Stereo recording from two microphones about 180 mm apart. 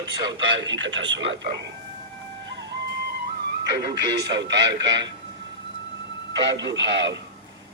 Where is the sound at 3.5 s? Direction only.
65° right (ahead or behind).